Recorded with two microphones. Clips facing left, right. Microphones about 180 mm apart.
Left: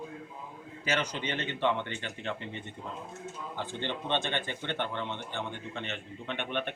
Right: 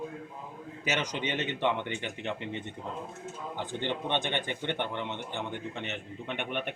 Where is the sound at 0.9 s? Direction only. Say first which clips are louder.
Even; 20° right (ahead or behind).